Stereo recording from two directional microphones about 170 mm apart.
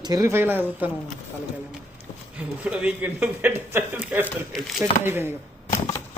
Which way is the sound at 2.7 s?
10° right (ahead or behind).